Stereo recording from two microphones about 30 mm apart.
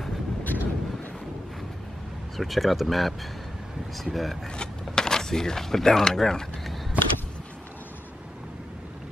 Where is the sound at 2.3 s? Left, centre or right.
Centre.